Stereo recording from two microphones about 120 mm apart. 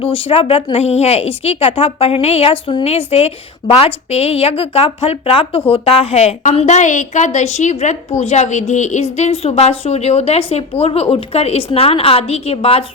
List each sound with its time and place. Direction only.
0.0 s a woman's voice: 50° left (ahead or behind); by 7.9 s 80° left
8.2 s a woman's voice: 65° left (ahead or behind); by 9.0 s 85° left
9.1 s a woman's voice: 60° left (ahead or behind)